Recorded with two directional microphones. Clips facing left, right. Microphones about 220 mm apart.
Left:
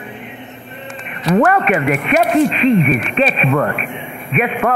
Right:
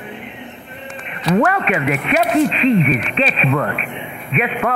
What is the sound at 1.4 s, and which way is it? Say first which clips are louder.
Speech: left 4 dB; 50° left (ahead or behind).